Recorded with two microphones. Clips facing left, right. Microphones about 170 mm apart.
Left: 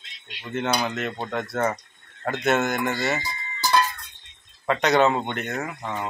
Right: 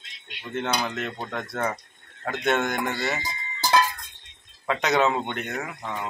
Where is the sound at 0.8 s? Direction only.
5° left (ahead or behind).